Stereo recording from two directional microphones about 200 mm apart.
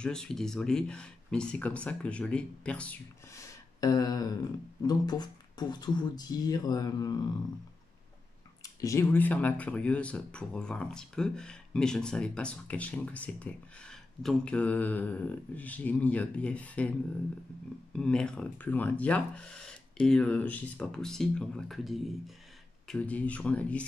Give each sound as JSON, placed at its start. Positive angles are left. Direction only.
{"t": 0.0, "sound": "speech", "side_deg": 5}
{"t": 3.8, "sound": "speech", "side_deg": 20}
{"t": 8.8, "sound": "speech", "side_deg": 15}
{"t": 17.9, "sound": "speech", "side_deg": 5}